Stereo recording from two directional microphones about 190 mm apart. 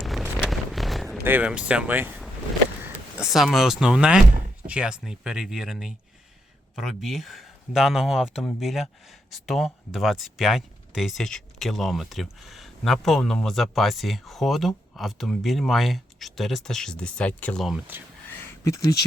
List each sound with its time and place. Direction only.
0.0 s a sound: centre (ahead or behind)
1.2 s speech: 10° right (ahead or behind)
18.6 s speech: 15° left (ahead or behind)